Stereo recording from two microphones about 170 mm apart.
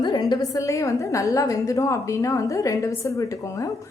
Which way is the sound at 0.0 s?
25° left (ahead or behind).